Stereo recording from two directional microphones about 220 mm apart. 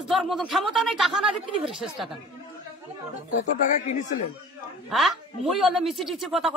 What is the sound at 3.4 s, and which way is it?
Speech, 35° left (ahead or behind).